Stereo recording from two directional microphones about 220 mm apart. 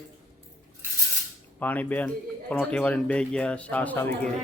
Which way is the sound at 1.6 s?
5° left (ahead or behind).